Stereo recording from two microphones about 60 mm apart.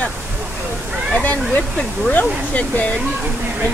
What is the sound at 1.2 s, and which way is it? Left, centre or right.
Speech, left.